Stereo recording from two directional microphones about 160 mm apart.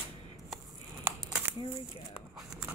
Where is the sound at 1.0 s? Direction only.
15° right (ahead or behind).